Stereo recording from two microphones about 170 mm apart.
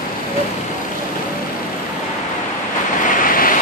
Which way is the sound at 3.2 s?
55° left (ahead or behind).